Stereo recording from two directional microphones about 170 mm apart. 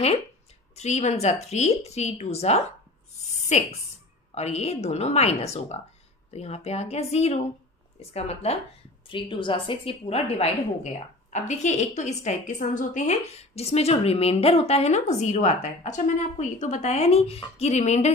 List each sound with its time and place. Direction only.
0.7 s a woman's voice: 40° left (ahead or behind)